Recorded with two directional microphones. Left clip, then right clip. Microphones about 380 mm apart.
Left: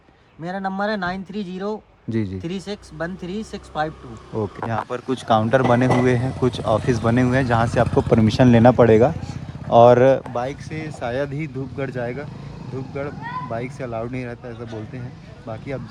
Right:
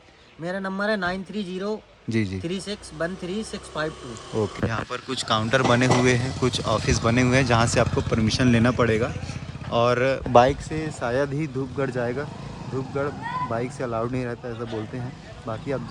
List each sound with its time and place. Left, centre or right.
0.4 s speech: centre
10.3 s speech: right
10.8 s speech: centre
13.5 s speech: centre